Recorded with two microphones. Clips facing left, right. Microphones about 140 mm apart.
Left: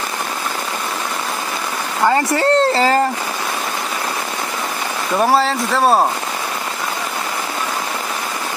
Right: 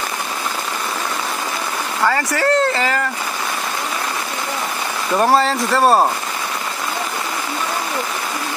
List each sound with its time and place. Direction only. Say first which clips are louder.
2.0 s speech: left 3 dB; 25° left (ahead or behind)
5.1 s speech: even; 5° left (ahead or behind)